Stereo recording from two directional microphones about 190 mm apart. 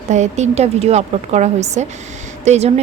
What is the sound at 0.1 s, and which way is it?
A woman's voice, 40° right (ahead or behind).